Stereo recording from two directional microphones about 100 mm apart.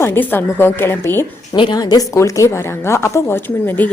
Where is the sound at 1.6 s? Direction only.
45° left (ahead or behind).